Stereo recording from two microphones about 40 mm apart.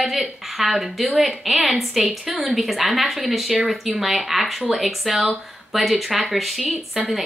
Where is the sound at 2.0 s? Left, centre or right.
Centre.